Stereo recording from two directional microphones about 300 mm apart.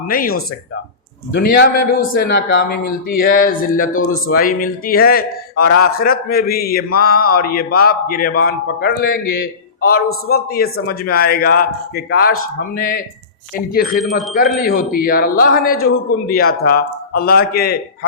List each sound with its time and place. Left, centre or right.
0.1 s a man's voice: left
1.4 s a man's voice: left
9.0 s a man's voice: left
9.9 s a man's voice: left
14.0 s speech: centre
14.5 s a man's voice: left